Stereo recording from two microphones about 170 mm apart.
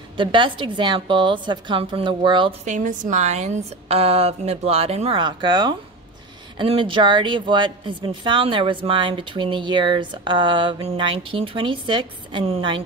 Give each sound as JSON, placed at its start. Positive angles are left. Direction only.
{"t": 0.2, "sound": "a woman's voice", "side_deg": -30}
{"t": 2.6, "sound": "a woman's voice", "side_deg": -50}